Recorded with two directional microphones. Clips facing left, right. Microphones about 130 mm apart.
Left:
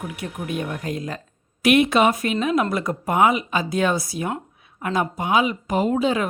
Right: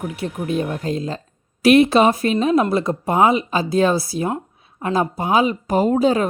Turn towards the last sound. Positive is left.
turn(degrees=-35)  # may be behind; listen again after turning